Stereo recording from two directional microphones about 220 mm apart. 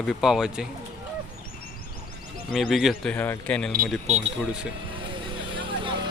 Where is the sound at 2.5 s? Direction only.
Centre (ahead or behind).